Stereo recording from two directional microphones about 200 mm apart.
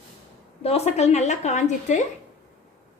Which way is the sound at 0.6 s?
30° left (ahead or behind).